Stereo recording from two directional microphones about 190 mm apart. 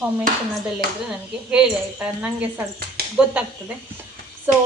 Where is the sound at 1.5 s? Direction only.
5° right (ahead or behind).